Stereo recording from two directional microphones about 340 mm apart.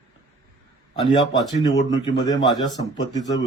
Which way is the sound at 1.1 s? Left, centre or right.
Centre.